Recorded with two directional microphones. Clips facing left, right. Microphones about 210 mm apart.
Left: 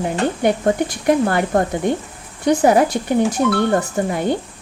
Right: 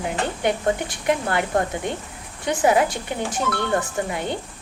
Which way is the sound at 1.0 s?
40° left (ahead or behind).